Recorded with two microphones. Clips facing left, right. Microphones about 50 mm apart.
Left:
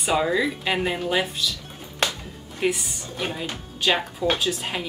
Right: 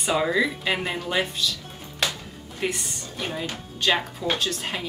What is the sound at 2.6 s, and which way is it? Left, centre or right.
Speech, centre.